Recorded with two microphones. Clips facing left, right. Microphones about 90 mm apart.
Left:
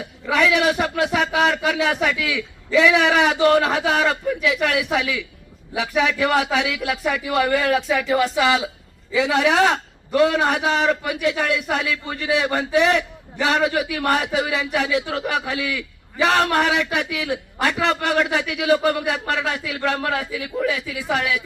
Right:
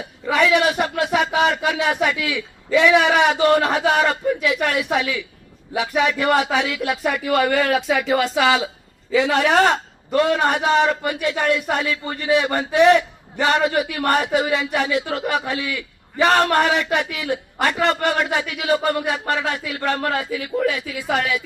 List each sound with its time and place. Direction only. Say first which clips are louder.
0.3 s a man's voice: right 1 dB; centre (ahead or behind)
7.3 s a man's voice: right 2 dB; 75° right (ahead or behind)
10.2 s a man's voice: even; centre (ahead or behind)